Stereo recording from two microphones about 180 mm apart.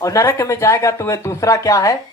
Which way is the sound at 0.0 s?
15° left (ahead or behind).